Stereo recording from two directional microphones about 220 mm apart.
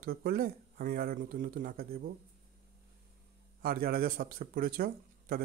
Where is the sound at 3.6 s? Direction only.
45° right (ahead or behind).